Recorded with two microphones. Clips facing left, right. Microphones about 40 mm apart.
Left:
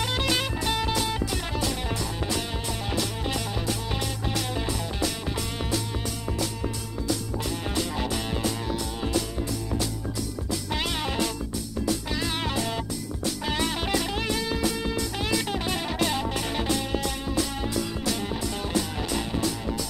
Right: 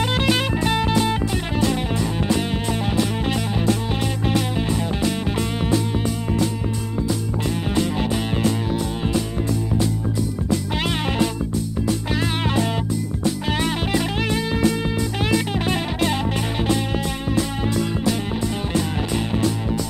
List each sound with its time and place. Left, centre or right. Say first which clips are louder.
0.0 s music: right 6 dB; right
4.3 s music: right 8 dB; right
7.7 s music: right 7 dB; right
12.2 s music: right 6 dB; right
17.4 s music: right 5 dB; right
19.1 s music: right 5 dB; right